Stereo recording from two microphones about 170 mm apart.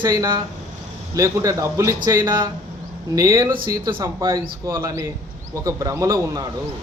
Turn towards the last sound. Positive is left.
turn(degrees=-20)  # may be behind; listen again after turning